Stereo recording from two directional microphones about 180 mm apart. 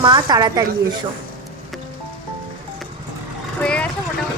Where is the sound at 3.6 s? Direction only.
5° left (ahead or behind).